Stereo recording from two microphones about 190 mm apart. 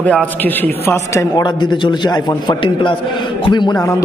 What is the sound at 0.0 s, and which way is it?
A man's voice, 5° left (ahead or behind).